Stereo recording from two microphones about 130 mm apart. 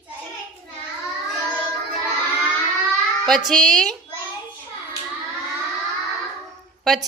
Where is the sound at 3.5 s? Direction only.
5° left (ahead or behind).